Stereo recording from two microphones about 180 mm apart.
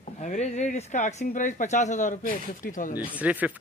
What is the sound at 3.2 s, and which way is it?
Speech, 10° right (ahead or behind).